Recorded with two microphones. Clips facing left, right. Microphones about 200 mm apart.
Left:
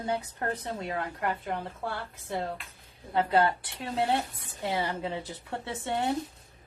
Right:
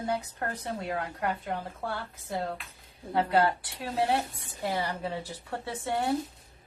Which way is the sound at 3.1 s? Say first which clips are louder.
Even; 25° left (ahead or behind).